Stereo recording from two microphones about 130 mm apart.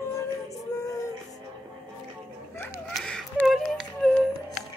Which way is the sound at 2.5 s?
20° left (ahead or behind).